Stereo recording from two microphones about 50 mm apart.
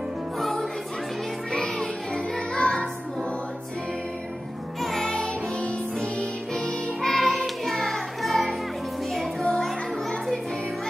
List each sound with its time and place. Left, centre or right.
0.4 s music: centre
4.8 s music: centre
5.1 s music: centre